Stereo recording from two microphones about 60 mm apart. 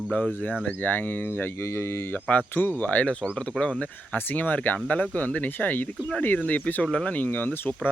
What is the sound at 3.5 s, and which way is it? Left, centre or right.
Speech, centre.